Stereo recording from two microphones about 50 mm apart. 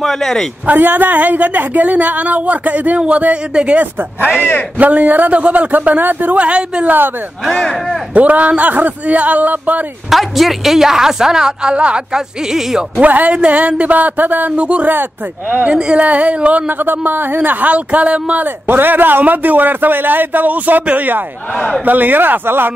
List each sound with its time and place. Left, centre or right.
0.0 s speech: centre
0.7 s a woman's voice: right
6.3 s speech: right
7.4 s speech: centre
8.1 s speech: right
10.0 s a woman's voice: centre
13.0 s a woman's voice: right
14.6 s speech: right
18.7 s a woman's voice: right